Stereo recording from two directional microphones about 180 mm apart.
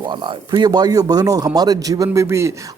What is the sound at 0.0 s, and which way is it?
A man's voice, 25° right (ahead or behind).